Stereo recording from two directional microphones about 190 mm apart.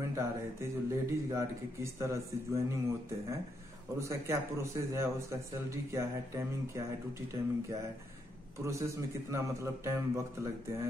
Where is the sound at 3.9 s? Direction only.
15° right (ahead or behind).